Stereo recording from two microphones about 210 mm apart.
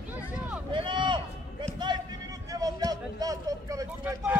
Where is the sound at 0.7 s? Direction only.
25° right (ahead or behind).